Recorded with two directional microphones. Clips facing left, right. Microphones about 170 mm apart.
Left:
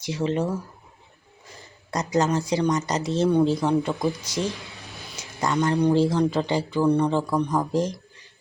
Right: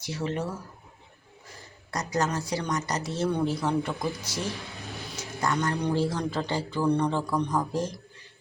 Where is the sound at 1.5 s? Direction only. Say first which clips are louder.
Left 5 dB; 20° left (ahead or behind).